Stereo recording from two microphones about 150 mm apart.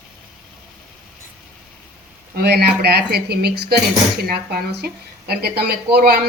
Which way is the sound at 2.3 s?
90° right.